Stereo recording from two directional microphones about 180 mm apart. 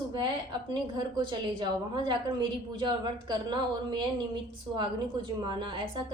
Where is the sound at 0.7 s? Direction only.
25° right (ahead or behind).